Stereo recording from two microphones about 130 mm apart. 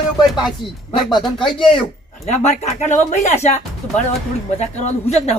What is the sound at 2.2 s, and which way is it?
Speech, 60° left (ahead or behind).